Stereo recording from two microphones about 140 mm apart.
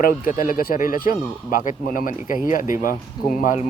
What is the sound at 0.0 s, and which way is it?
Speech, 85° left.